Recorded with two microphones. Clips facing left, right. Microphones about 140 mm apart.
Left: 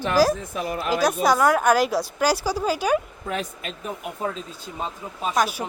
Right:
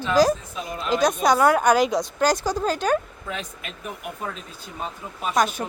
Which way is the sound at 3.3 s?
35° left (ahead or behind).